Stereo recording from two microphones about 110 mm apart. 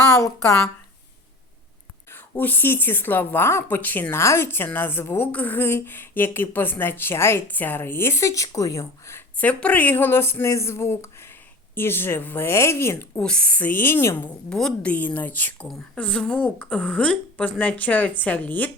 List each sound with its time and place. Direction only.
0.1 s speech: 30° left (ahead or behind)
2.0 s speech: 20° left (ahead or behind)
9.4 s speech: 10° left (ahead or behind)
13.1 s a woman's voice: 10° left (ahead or behind)
14.5 s a woman's voice: 10° left (ahead or behind)